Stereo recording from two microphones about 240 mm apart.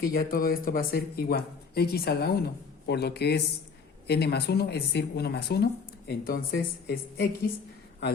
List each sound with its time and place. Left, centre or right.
0.0 s speech: left